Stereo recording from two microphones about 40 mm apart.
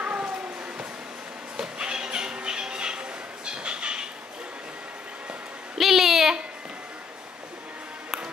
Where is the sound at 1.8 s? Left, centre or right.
Right.